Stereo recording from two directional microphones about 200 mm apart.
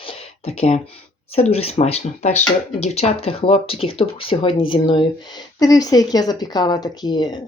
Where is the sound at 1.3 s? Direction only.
30° left (ahead or behind).